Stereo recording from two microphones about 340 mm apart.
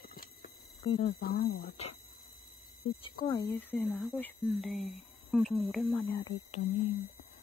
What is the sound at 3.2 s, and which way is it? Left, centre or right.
Speech, centre.